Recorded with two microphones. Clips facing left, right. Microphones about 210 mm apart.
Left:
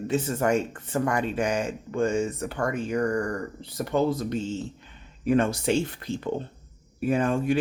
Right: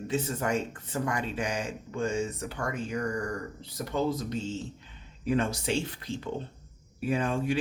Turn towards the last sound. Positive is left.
turn(degrees=50)  # may be behind; listen again after turning